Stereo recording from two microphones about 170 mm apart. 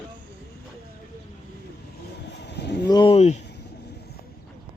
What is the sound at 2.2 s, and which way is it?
Vehicle, 85° left.